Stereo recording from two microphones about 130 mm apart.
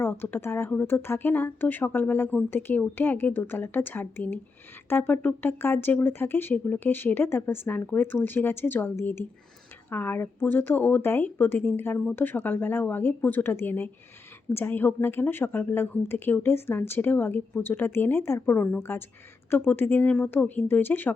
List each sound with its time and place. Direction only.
0.0 s a woman's voice: 15° left (ahead or behind)